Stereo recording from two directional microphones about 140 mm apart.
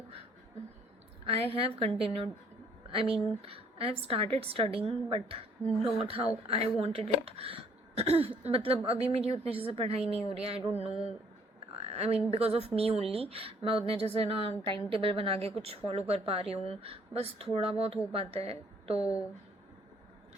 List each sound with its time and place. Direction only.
1.3 s speech: 45° right (ahead or behind)
11.8 s speech: 50° right (ahead or behind)